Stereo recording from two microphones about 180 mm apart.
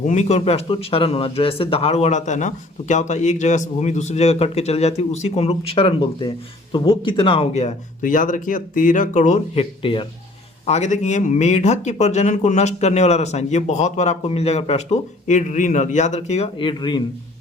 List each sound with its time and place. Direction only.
0.0 s speech: 40° left (ahead or behind)
9.8 s speech: 30° left (ahead or behind)
10.7 s speech: 40° left (ahead or behind)